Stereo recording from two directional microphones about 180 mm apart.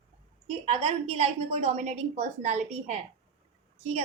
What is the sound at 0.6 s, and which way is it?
A woman's voice, 35° right (ahead or behind).